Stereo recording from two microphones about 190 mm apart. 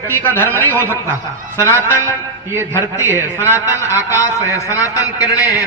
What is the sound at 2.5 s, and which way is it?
Speech, 15° right (ahead or behind).